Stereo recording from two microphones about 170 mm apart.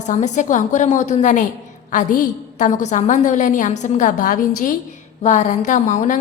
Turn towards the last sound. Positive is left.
turn(degrees=45)  # may be behind; listen again after turning